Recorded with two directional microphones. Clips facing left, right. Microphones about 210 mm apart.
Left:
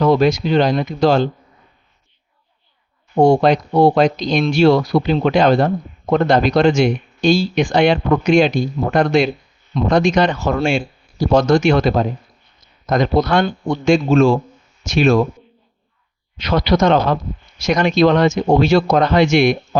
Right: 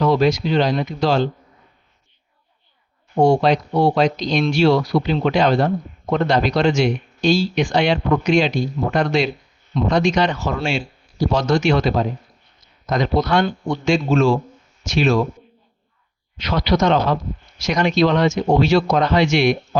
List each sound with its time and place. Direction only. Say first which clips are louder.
0.0 s speech: left 3 dB; 50° left (ahead or behind)
3.2 s speech: left 3 dB; 50° left (ahead or behind)
16.4 s speech: left 3 dB; 50° left (ahead or behind)